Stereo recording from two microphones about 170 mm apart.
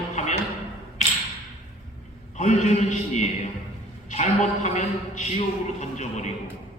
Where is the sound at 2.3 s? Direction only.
45° left (ahead or behind).